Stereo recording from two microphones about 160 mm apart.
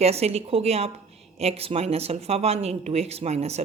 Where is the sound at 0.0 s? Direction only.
40° right (ahead or behind).